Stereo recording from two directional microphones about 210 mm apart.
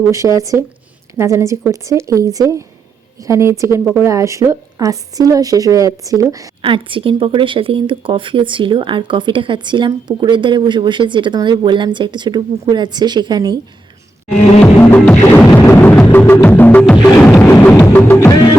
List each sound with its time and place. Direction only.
0.3 s a woman's voice: 15° right (ahead or behind)
14.6 s music: 5° left (ahead or behind)